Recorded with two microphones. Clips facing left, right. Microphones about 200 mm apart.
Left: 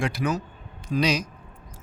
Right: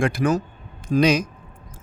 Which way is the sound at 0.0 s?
50° right (ahead or behind).